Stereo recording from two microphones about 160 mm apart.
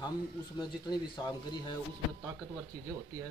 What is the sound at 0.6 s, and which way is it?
Speech, 25° left (ahead or behind).